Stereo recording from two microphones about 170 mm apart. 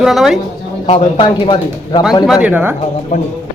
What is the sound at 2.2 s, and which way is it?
Speech, 5° right (ahead or behind).